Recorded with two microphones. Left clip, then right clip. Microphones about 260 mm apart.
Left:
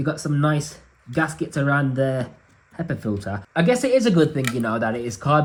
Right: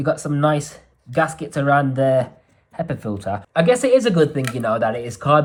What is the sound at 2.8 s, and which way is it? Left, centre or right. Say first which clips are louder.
Speech: right 2 dB; right.